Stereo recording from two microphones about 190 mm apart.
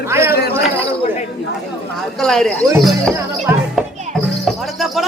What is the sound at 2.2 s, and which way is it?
Speech, centre (ahead or behind).